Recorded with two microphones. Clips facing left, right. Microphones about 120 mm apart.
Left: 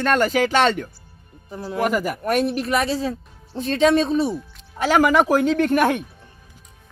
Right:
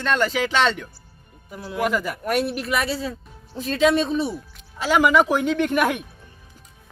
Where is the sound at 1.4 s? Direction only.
35° left (ahead or behind).